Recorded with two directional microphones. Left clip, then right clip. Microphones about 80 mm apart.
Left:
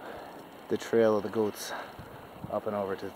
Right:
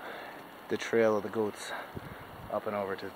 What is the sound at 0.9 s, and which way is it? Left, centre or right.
Speech, centre.